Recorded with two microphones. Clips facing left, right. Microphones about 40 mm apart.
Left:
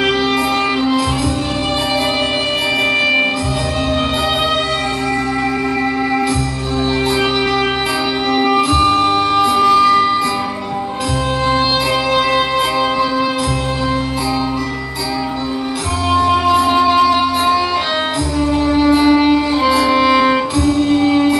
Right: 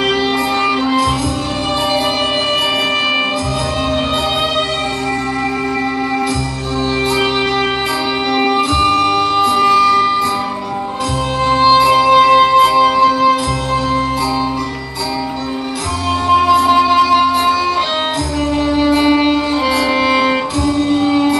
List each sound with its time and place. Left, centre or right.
8.3 s music: centre
8.5 s music: centre
8.9 s music: left
9.7 s music: centre
11.6 s music: centre
12.1 s music: centre
16.3 s music: centre
18.9 s music: centre
20.0 s music: centre